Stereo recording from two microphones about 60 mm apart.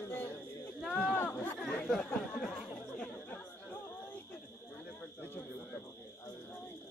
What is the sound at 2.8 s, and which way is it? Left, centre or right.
Chatter, centre.